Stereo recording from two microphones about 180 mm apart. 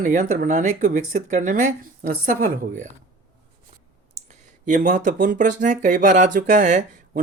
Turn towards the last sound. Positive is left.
turn(degrees=-45)  # may be behind; listen again after turning